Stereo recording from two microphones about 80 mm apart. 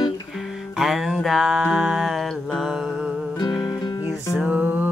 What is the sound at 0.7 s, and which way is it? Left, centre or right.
Music, centre.